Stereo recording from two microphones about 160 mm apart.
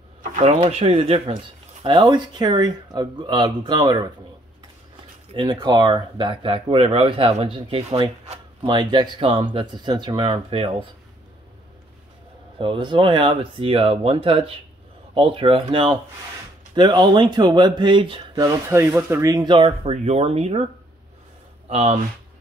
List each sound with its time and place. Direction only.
0.2 s speech: 45° right (ahead or behind); by 4.1 s 25° right (ahead or behind)
5.3 s speech: 30° right (ahead or behind)
12.5 s speech: 30° right (ahead or behind)
18.4 s speech: 15° right (ahead or behind); by 20.6 s 40° right (ahead or behind)
21.6 s speech: 40° right (ahead or behind)